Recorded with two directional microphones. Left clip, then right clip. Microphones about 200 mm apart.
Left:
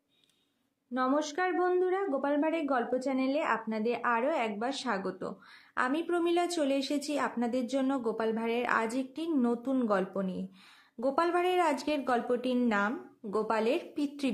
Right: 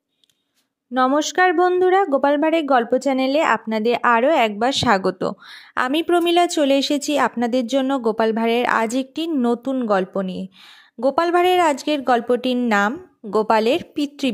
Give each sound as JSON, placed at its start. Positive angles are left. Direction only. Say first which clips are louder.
{"t": 0.9, "sound": "speech", "louder": "right 13 dB", "side_deg": -40}